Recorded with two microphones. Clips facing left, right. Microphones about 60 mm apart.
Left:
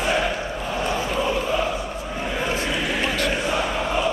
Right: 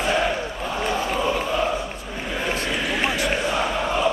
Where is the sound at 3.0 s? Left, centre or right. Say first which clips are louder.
Right 1 dB; centre.